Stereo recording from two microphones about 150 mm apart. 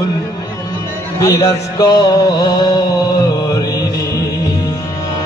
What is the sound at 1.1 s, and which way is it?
Music, 25° left (ahead or behind).